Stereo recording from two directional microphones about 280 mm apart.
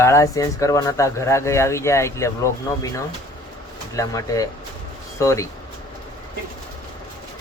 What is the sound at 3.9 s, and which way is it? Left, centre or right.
Speech, centre.